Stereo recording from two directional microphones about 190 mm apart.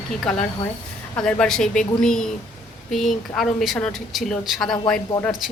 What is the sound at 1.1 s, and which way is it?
A woman's voice, 5° left (ahead or behind).